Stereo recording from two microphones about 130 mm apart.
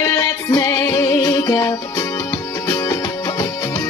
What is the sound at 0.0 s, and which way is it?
Music, 25° left (ahead or behind).